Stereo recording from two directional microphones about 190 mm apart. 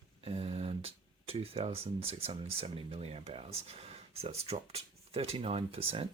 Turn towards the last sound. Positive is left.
turn(degrees=-30)  # may be behind; listen again after turning